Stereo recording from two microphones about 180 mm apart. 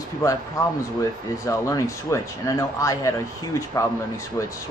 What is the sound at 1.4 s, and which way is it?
Speech, 15° left (ahead or behind).